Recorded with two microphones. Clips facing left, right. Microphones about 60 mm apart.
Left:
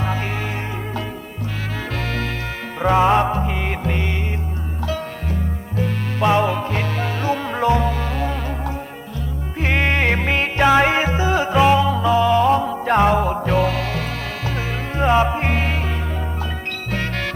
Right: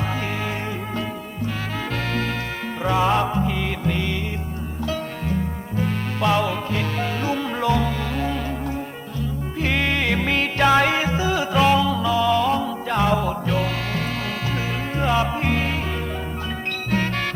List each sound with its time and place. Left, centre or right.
2.9 s music: left
6.1 s music: left
9.6 s music: left
10.9 s music: left
11.5 s music: centre
11.8 s music: left
14.9 s music: left